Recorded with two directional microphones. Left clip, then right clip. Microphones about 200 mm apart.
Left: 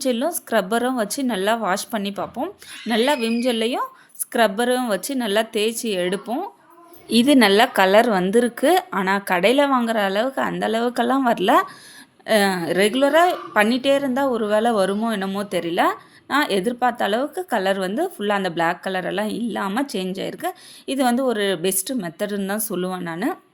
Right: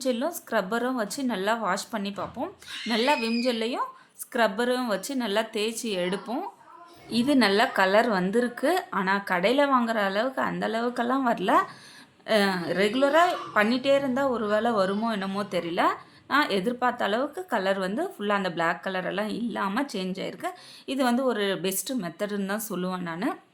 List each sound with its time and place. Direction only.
0.0 s a woman's voice: 30° left (ahead or behind)
7.1 s a woman's voice: 40° left (ahead or behind); by 23.4 s 20° left (ahead or behind)